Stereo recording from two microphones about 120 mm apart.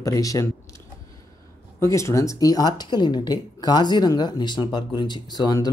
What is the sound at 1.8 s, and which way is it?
Speech, 25° left (ahead or behind).